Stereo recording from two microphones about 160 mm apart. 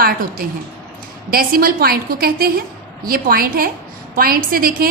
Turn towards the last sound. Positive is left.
turn(degrees=-65)  # may be behind; listen again after turning